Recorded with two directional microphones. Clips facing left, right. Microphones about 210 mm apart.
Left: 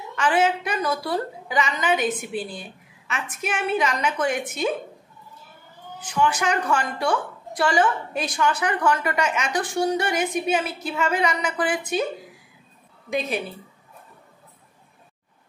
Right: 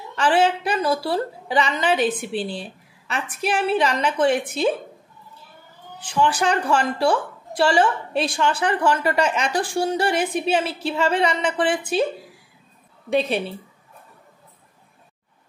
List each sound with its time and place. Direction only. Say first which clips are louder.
0.1 s a woman's voice: right 2 dB; 30° right (ahead or behind)
5.9 s a woman's voice: right 2 dB; 30° right (ahead or behind)
13.1 s a woman's voice: right 5 dB; 30° right (ahead or behind)